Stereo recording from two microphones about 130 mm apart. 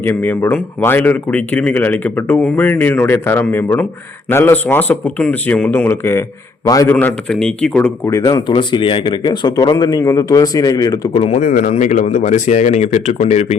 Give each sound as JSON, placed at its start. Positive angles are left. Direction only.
{"t": 0.0, "sound": "speech", "side_deg": 15}
{"t": 8.2, "sound": "speech", "side_deg": 35}
{"t": 11.1, "sound": "speech", "side_deg": 50}
{"t": 11.3, "sound": "speech", "side_deg": 85}